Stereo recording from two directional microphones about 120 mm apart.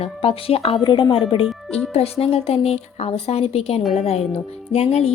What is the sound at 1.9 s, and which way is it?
A woman's voice, 55° left (ahead or behind).